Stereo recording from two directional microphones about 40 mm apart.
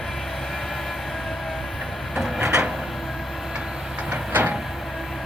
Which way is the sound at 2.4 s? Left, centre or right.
Right.